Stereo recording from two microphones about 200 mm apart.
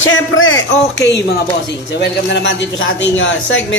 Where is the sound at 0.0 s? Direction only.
80° left.